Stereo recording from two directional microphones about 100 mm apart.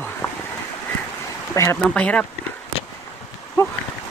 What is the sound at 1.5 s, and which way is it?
Speech, 30° left (ahead or behind).